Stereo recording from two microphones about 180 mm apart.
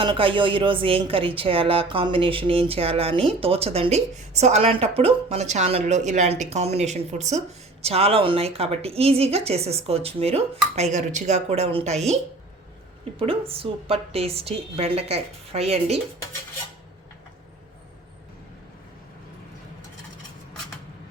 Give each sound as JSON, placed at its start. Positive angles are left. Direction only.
{"t": 0.0, "sound": "speech", "side_deg": -30}